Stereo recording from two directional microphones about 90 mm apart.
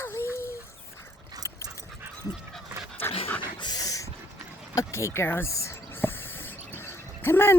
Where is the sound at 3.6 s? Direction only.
50° left (ahead or behind).